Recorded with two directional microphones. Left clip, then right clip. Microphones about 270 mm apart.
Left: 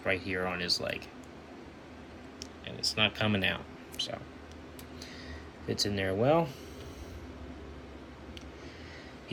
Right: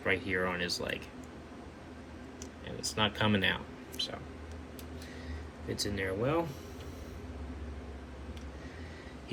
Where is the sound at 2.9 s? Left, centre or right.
Centre.